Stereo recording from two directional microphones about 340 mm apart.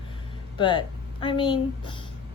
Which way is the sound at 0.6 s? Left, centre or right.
Centre.